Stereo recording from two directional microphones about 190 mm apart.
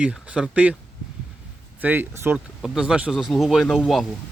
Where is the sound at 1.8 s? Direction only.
10° right (ahead or behind).